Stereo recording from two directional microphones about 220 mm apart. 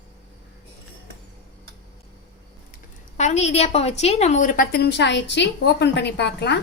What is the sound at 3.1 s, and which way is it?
A woman's voice, 30° left (ahead or behind).